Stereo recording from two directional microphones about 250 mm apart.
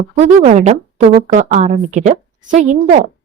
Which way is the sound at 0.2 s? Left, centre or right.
Right.